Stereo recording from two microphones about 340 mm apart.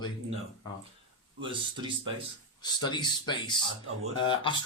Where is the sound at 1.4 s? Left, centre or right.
Centre.